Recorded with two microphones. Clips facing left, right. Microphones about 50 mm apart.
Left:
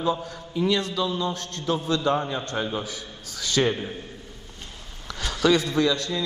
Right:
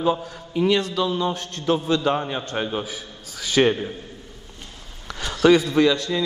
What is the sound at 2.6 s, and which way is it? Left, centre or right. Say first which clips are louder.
A man's voice: right 2 dB; centre.